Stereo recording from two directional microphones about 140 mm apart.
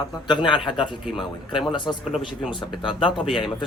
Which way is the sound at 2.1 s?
5° right (ahead or behind).